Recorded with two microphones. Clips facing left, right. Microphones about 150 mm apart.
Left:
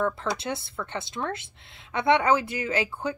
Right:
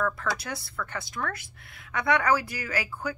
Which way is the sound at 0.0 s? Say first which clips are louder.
Left 2 dB; 25° left (ahead or behind).